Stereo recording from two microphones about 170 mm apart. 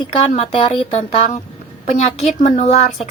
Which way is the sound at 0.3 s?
40° left (ahead or behind).